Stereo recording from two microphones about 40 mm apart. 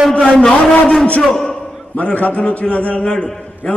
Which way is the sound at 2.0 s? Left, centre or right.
Left.